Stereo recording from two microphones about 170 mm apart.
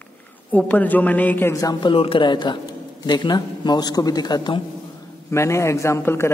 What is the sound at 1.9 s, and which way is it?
A man's voice, 30° left (ahead or behind).